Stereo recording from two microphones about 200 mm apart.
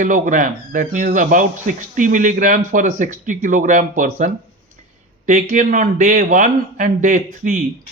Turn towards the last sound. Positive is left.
turn(degrees=-40)  # may be behind; listen again after turning